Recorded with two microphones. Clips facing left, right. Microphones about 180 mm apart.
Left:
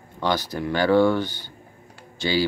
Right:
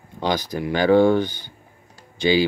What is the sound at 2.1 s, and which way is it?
Typing, 15° right (ahead or behind).